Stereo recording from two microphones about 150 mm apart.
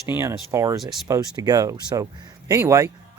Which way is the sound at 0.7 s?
Centre (ahead or behind).